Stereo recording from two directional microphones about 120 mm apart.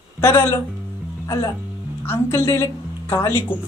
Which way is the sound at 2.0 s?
20° left (ahead or behind).